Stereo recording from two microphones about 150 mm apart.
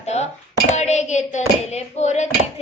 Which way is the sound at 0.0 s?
45° left (ahead or behind).